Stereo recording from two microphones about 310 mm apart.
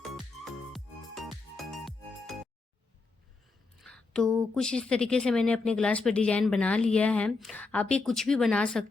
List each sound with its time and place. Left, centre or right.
1.5 s music: centre
3.8 s a sound: centre
4.5 s speech: centre